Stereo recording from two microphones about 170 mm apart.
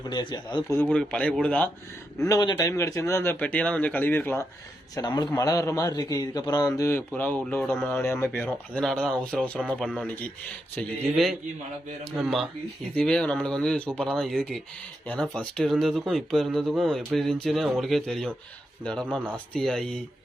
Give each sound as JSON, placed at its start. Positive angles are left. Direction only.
{"t": 0.1, "sound": "a man's voice", "side_deg": 25}
{"t": 0.7, "sound": "speech", "side_deg": 10}
{"t": 2.1, "sound": "speech", "side_deg": 20}
{"t": 4.9, "sound": "a man's voice", "side_deg": 25}
{"t": 19.5, "sound": "speech", "side_deg": 5}